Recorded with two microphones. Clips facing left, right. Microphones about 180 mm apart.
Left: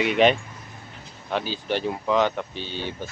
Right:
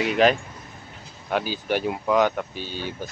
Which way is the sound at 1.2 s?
10° right (ahead or behind).